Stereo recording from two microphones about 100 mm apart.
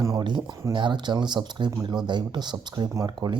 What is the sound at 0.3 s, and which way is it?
Speech, 50° right (ahead or behind).